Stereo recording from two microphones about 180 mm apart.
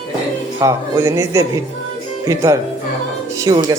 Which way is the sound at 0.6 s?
15° right (ahead or behind).